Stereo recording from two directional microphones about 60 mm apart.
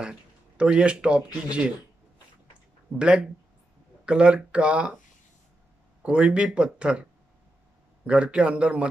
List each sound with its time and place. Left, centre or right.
0.0 s speech: centre
3.0 s speech: centre
6.0 s speech: centre
8.1 s a man's voice: centre